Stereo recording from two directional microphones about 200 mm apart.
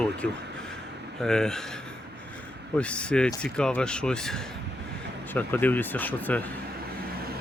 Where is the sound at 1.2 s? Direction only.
5° left (ahead or behind).